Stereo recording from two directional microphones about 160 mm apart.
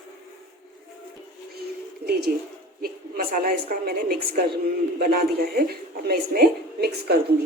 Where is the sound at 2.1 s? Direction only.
75° right (ahead or behind).